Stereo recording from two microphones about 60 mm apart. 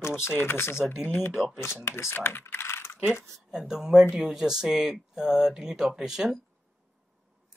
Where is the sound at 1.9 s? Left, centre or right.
Left.